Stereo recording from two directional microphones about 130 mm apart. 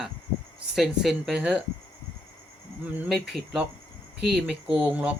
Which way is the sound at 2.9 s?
5° right (ahead or behind).